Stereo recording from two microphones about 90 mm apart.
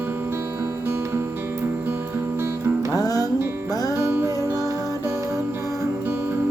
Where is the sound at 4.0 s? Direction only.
30° right (ahead or behind).